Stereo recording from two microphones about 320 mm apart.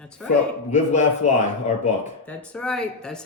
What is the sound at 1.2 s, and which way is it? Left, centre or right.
Speech, left.